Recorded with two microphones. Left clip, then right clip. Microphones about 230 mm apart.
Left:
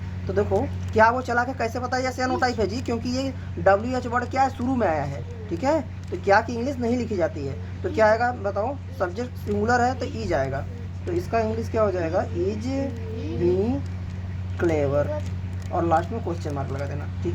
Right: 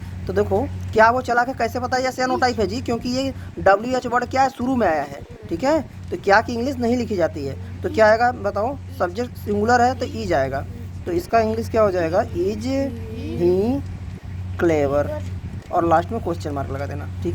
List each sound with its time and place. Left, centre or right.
0.3 s speech: right
14.6 s speech: right